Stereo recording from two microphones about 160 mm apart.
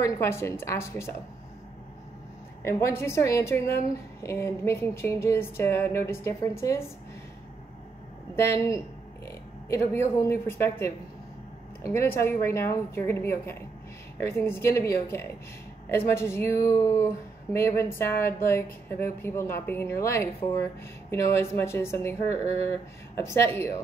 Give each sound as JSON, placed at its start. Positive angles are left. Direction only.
{"t": 0.0, "sound": "speech", "side_deg": 15}
{"t": 2.6, "sound": "speech", "side_deg": 15}
{"t": 8.4, "sound": "speech", "side_deg": 20}
{"t": 11.9, "sound": "speech", "side_deg": 15}